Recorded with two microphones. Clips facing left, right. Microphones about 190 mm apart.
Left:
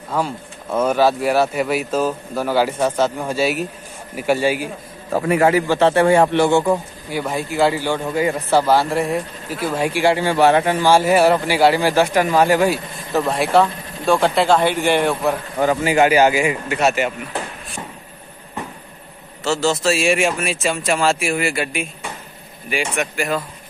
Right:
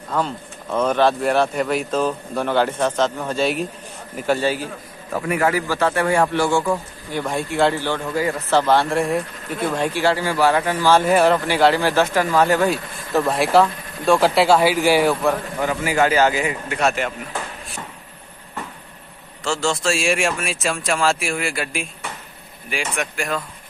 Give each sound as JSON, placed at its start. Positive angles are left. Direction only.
{"t": 0.1, "sound": "speech", "side_deg": 10}
{"t": 5.1, "sound": "speech", "side_deg": 30}
{"t": 7.1, "sound": "speech", "side_deg": 5}
{"t": 8.0, "sound": "speech", "side_deg": 20}
{"t": 10.2, "sound": "speech", "side_deg": 25}
{"t": 10.9, "sound": "speech", "side_deg": 10}
{"t": 15.6, "sound": "speech", "side_deg": 25}
{"t": 19.4, "sound": "speech", "side_deg": 5}